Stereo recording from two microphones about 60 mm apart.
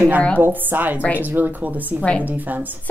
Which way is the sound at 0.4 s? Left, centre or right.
Right.